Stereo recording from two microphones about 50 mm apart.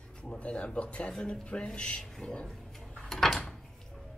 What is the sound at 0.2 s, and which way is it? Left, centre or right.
Speech, left.